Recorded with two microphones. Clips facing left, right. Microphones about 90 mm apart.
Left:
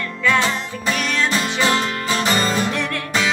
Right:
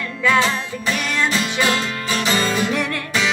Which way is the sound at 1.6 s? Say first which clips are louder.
Left 2 dB; 30° left (ahead or behind).